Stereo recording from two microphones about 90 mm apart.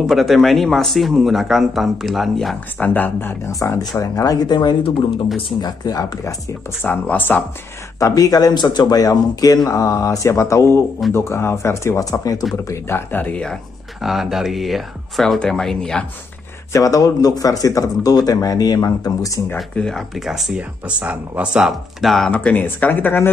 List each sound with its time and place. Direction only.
0.0 s speech: centre (ahead or behind)
2.8 s speech: 20° left (ahead or behind); by 6.3 s 40° left (ahead or behind)
6.8 s speech: 20° left (ahead or behind)
8.0 s speech: 40° left (ahead or behind)
12.6 s speech: 25° left (ahead or behind)
14.0 s speech: 5° right (ahead or behind)
16.7 s speech: 40° left (ahead or behind)
19.5 s speech: 5° left (ahead or behind)
22.3 s speech: 15° left (ahead or behind)